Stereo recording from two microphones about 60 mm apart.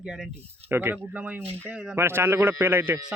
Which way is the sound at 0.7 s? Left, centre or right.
Right.